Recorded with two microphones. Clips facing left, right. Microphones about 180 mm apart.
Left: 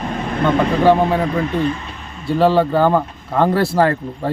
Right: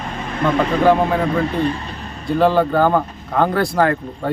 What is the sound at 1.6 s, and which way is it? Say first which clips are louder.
Speech: even; 35° right (ahead or behind).